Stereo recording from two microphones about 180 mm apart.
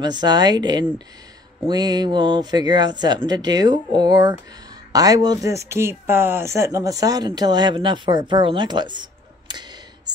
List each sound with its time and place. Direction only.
0.0 s speech: 25° right (ahead or behind)